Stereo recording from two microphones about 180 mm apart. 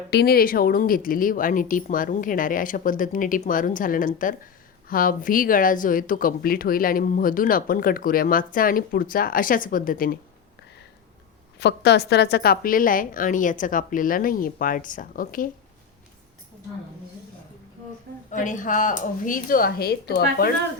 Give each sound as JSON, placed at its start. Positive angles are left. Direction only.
{"t": 0.1, "sound": "speech", "side_deg": 60}
{"t": 11.6, "sound": "speech", "side_deg": 70}
{"t": 18.3, "sound": "speech", "side_deg": 45}